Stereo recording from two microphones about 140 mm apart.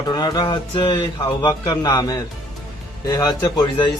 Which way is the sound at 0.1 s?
30° left (ahead or behind).